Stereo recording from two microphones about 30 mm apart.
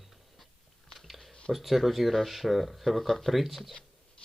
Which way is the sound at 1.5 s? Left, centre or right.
Centre.